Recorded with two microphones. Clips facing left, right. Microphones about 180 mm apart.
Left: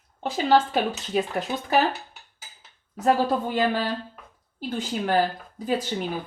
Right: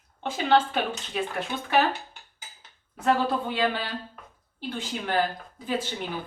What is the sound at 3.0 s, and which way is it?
Speech, 40° left (ahead or behind).